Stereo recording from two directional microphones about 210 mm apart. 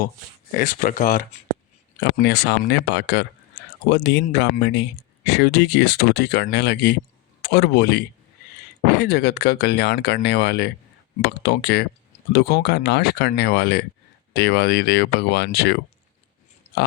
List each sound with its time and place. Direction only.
0.5 s speech: 40° left (ahead or behind)
2.0 s speech: 50° left (ahead or behind)